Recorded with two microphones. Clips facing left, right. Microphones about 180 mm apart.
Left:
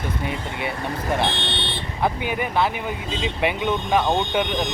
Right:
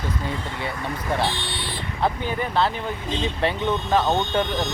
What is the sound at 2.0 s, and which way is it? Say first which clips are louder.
Speech: left 1 dB; 10° left (ahead or behind).